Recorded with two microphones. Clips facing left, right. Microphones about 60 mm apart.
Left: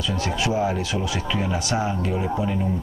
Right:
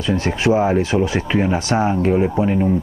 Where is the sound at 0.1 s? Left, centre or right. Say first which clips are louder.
Right 9 dB; right.